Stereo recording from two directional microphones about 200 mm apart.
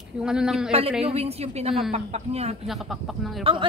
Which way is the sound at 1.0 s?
30° right (ahead or behind).